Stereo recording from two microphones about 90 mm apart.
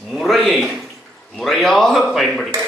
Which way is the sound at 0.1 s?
Centre (ahead or behind).